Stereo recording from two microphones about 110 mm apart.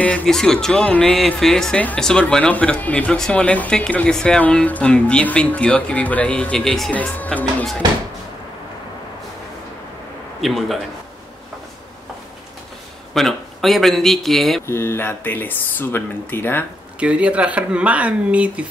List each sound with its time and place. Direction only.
0.0 s speech: 10° left (ahead or behind)
10.4 s a man's voice: centre (ahead or behind)
13.1 s a man's voice: centre (ahead or behind)
14.7 s speech: 20° left (ahead or behind)
17.0 s speech: 10° right (ahead or behind)